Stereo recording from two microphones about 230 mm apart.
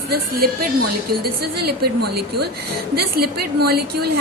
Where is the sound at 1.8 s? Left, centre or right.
Right.